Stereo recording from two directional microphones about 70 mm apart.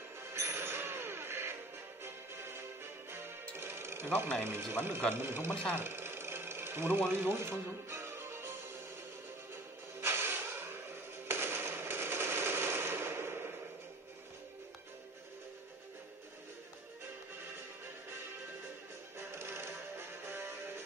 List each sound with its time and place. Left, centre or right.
0.3 s music: right
4.4 s speech: right
5.8 s sewing machine: right
9.9 s music: right
11.2 s machine gun: right
19.1 s music: right